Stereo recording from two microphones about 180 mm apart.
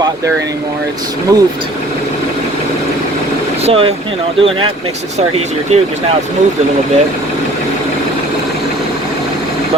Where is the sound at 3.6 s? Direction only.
30° right (ahead or behind).